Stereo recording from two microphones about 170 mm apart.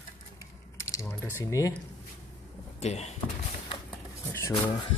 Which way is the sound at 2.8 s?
40° left (ahead or behind).